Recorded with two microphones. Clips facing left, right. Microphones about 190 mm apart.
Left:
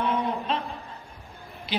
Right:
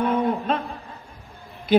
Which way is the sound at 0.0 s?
50° right (ahead or behind).